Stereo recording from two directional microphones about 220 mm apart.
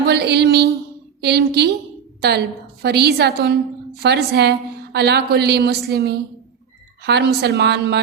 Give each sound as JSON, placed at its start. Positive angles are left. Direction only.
{"t": 0.1, "sound": "a woman's voice", "side_deg": -50}
{"t": 2.8, "sound": "a woman's voice", "side_deg": -50}